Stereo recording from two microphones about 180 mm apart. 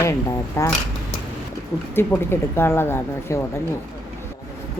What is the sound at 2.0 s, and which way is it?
Speech, 15° left (ahead or behind).